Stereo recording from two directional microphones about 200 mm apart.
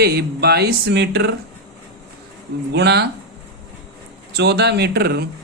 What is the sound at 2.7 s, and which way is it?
Speech, 55° right (ahead or behind).